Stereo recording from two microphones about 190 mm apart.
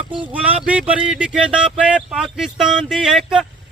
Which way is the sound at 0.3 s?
10° right (ahead or behind).